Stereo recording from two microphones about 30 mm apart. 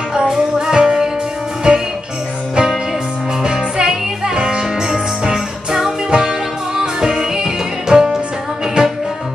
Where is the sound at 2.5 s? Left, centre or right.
Right.